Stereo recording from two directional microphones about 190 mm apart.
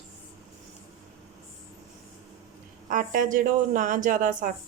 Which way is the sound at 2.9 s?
45° right (ahead or behind).